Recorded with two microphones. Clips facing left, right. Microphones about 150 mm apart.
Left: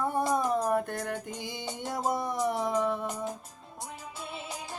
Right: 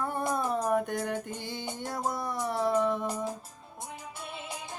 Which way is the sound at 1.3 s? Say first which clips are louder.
Even; 15° left (ahead or behind).